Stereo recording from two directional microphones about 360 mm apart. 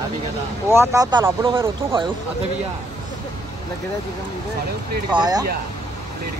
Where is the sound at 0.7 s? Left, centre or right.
Centre.